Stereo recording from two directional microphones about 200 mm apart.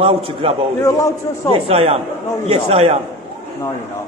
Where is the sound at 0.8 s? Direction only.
15° left (ahead or behind).